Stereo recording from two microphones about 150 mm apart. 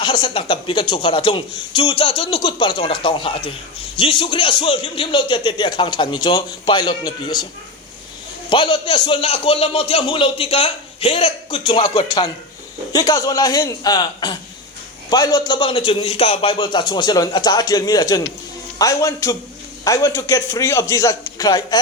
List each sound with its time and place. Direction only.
0.0 s a man's voice: 35° left (ahead or behind)
8.4 s a man's voice: 35° left (ahead or behind)